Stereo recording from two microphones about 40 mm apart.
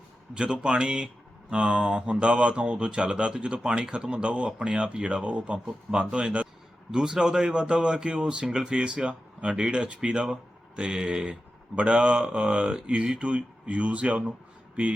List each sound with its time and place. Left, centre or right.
0.3 s speech: right